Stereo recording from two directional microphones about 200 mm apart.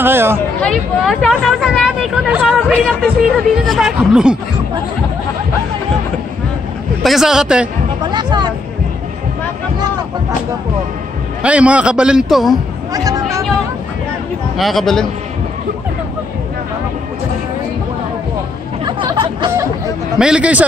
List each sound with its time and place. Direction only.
0.0 s speech: 10° right (ahead or behind)
0.6 s speech: centre (ahead or behind)
7.0 s speech: centre (ahead or behind)
8.0 s a sound: 20° right (ahead or behind)
11.4 s speech: 5° right (ahead or behind)
12.9 s a sound: 15° right (ahead or behind)
14.6 s speech: centre (ahead or behind)
18.9 s chatter: 20° right (ahead or behind)
20.2 s speech: 5° right (ahead or behind)